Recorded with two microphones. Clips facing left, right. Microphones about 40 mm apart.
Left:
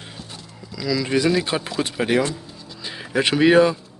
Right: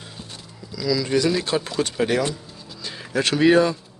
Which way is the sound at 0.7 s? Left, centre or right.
Centre.